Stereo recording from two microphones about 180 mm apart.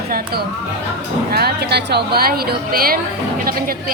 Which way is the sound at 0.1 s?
55° right (ahead or behind).